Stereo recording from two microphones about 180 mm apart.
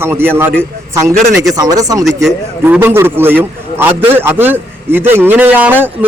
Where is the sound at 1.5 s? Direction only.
20° right (ahead or behind).